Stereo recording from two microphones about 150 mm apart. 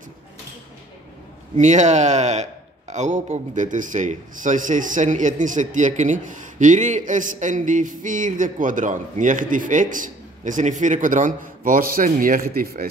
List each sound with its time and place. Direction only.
1.6 s a man's voice: 50° right (ahead or behind); by 12.8 s 70° right (ahead or behind)